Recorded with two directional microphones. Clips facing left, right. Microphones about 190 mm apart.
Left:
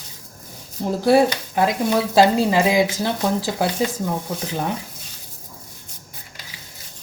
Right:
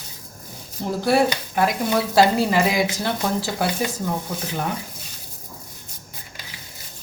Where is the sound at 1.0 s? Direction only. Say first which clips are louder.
Left 4 dB; 20° left (ahead or behind).